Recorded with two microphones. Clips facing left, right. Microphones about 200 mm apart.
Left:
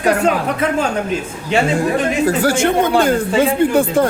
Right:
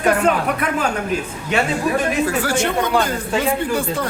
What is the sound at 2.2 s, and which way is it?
Speech, 40° left (ahead or behind).